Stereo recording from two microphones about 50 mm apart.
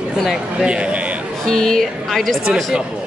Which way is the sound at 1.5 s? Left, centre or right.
Centre.